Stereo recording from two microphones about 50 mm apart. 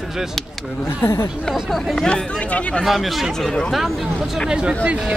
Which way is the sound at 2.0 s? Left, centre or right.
Left.